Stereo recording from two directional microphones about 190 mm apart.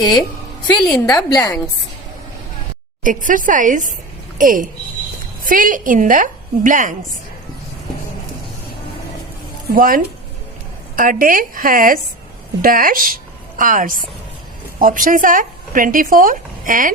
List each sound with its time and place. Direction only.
0.8 s a woman's voice: 5° left (ahead or behind)
1.0 s a woman's voice: 20° left (ahead or behind)
3.0 s a woman's voice: 45° right (ahead or behind)
9.6 s a woman's voice: 50° right (ahead or behind)